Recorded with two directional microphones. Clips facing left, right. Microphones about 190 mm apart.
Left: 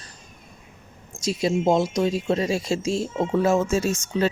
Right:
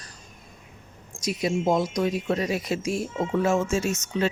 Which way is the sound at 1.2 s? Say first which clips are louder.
Left 3 dB; 25° left (ahead or behind).